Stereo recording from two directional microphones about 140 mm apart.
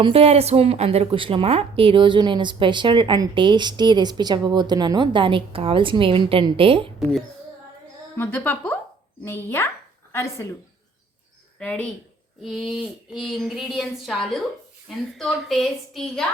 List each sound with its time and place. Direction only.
0.0 s a woman's voice: 45° right (ahead or behind)
8.1 s a woman's voice: 15° left (ahead or behind)
11.6 s a woman's voice: 10° left (ahead or behind)